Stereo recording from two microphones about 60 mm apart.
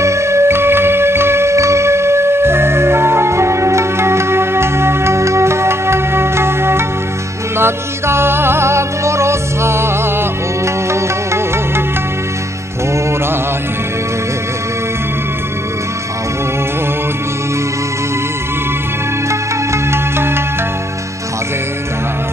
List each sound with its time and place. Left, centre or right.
0.0 s music: right
19.2 s music: right